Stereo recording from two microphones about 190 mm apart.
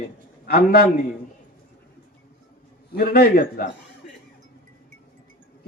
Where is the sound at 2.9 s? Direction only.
55° left (ahead or behind).